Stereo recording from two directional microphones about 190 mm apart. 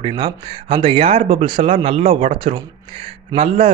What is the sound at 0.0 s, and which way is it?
Speech, 25° right (ahead or behind).